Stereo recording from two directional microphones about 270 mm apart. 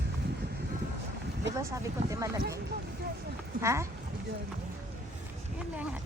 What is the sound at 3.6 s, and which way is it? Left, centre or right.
Speech, centre.